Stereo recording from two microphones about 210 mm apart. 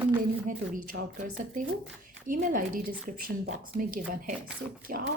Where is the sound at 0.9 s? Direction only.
65° right (ahead or behind).